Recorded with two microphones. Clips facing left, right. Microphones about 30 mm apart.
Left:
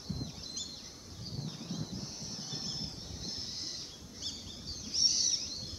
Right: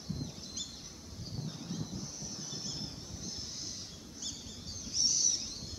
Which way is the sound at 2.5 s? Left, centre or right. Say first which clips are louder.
Left 2 dB; left.